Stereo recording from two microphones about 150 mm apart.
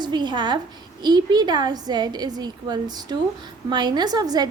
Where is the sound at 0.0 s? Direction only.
30° right (ahead or behind).